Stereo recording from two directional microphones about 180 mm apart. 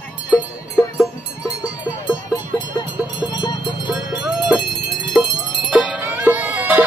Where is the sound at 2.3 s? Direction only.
20° left (ahead or behind).